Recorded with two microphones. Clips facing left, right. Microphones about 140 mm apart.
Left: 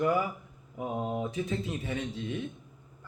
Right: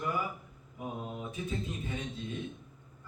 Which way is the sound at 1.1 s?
90° left.